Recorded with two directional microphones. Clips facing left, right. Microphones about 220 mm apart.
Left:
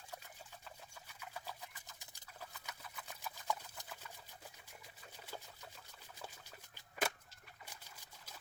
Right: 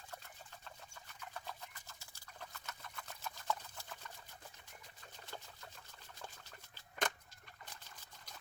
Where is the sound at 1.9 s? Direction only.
15° left (ahead or behind).